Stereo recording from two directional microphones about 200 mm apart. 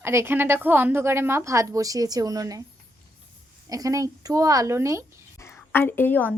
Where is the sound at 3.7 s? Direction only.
15° right (ahead or behind).